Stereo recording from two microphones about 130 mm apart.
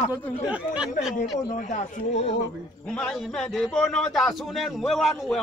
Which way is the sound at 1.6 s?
60° left (ahead or behind).